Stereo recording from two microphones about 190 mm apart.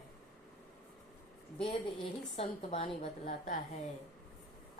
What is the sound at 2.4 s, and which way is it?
Speech, 35° left (ahead or behind).